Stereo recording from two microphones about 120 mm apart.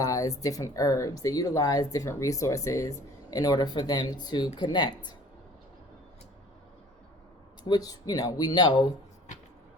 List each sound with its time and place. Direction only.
0.0 s speech: 30° left (ahead or behind)
7.7 s speech: 30° left (ahead or behind)